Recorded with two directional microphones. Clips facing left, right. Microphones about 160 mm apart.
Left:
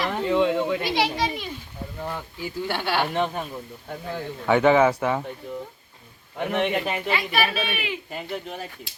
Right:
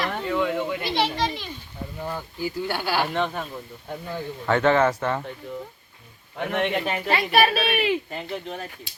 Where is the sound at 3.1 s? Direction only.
10° left (ahead or behind).